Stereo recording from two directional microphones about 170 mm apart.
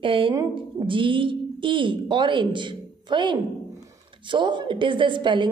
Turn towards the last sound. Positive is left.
turn(degrees=-30)  # may be behind; listen again after turning